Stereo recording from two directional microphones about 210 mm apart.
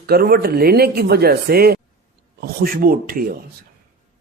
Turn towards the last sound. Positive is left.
turn(degrees=-45)  # may be behind; listen again after turning